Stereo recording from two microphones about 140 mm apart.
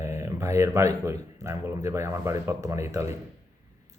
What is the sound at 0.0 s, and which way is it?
Speech, 20° right (ahead or behind).